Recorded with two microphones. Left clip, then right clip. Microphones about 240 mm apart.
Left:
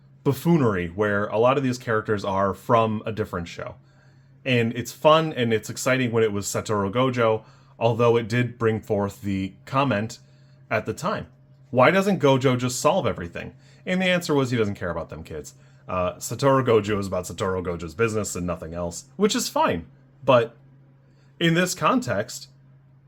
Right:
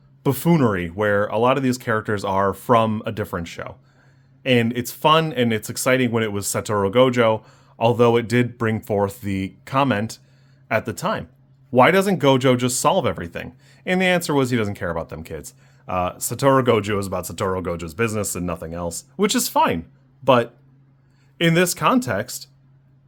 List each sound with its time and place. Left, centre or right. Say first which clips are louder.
0.2 s speech: right 3 dB; right